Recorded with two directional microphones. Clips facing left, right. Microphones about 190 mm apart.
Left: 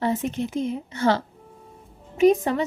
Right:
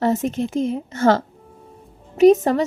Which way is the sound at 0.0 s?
45° right (ahead or behind).